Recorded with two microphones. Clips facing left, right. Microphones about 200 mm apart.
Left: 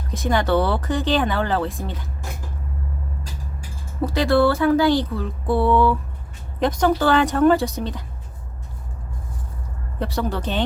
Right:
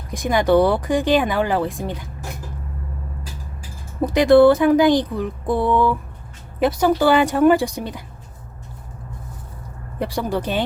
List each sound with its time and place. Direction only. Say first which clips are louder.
0.1 s speech: right 4 dB; 10° right (ahead or behind)
4.0 s speech: right 6 dB; 20° right (ahead or behind)
10.0 s speech: right 2 dB; 10° right (ahead or behind)